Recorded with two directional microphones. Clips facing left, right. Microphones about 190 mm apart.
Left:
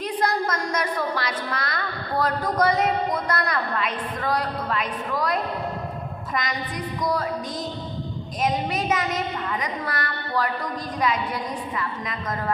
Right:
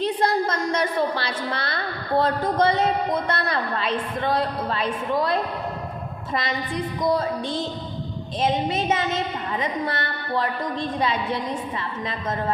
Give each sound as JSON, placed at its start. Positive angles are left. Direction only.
{"t": 0.0, "sound": "a woman's voice", "side_deg": -25}